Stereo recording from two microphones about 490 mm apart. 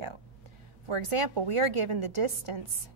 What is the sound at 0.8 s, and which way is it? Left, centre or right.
A woman's voice, right.